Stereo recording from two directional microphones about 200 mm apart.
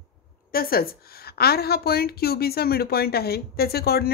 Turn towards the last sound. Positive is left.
turn(degrees=50)  # may be behind; listen again after turning